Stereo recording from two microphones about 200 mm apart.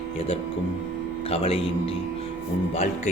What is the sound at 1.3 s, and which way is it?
Speech, 30° left (ahead or behind).